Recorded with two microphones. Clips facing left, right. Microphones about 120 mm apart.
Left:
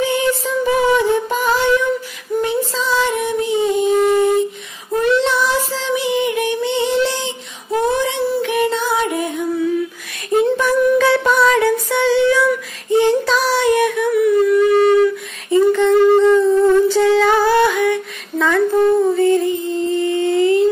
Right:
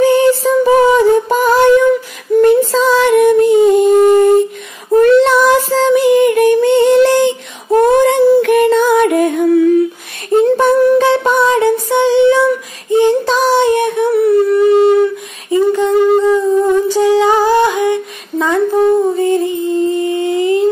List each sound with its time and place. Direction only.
0.0 s music: 40° right (ahead or behind)
0.9 s a sound: 40° right (ahead or behind)
2.7 s female singing: 55° right (ahead or behind)
5.0 s child singing: 50° right (ahead or behind)
10.5 s music: 30° right (ahead or behind)
15.5 s humming: 15° right (ahead or behind)